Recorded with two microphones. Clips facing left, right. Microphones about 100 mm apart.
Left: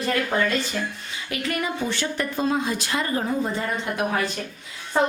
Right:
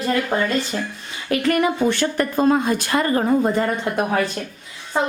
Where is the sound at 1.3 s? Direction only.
50° right (ahead or behind).